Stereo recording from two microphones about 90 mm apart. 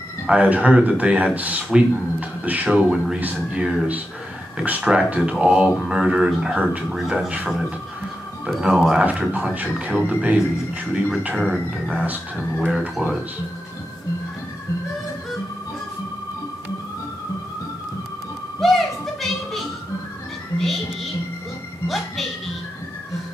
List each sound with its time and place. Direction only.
0.3 s speech: 15° right (ahead or behind)
8.5 s speech: 5° right (ahead or behind)
18.6 s music: centre (ahead or behind)